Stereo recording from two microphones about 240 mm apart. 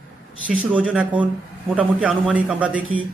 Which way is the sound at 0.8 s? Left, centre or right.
Centre.